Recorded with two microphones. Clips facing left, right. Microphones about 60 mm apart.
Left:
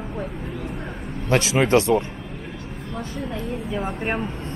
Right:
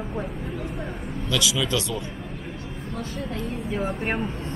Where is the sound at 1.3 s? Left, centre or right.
Left.